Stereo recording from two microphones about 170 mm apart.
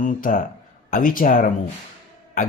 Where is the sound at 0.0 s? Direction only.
50° left (ahead or behind).